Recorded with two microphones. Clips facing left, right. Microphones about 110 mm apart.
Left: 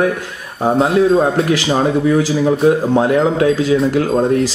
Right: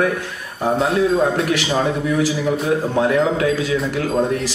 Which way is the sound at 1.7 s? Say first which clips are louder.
Left 5 dB; 35° left (ahead or behind).